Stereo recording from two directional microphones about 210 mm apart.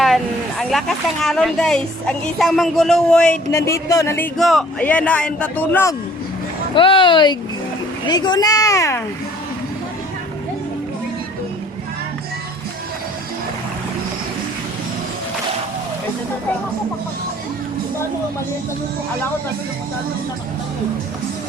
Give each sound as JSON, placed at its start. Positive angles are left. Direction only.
{"t": 0.6, "sound": "a woman's voice", "side_deg": 0}
{"t": 3.5, "sound": "speech", "side_deg": 15}
{"t": 4.4, "sound": "speech", "side_deg": 0}
{"t": 6.7, "sound": "speech", "side_deg": 25}